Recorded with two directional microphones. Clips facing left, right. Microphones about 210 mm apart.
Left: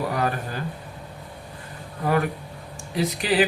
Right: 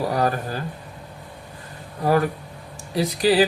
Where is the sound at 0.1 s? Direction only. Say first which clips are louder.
Right 3 dB; 35° right (ahead or behind).